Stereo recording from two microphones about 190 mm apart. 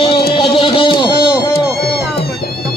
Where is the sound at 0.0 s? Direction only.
25° left (ahead or behind).